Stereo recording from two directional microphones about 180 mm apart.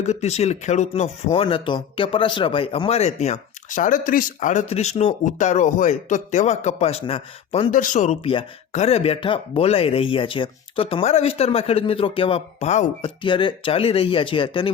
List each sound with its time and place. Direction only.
0.0 s speech: 35° left (ahead or behind)
7.7 s speech: 45° left (ahead or behind)
13.2 s speech: 25° left (ahead or behind)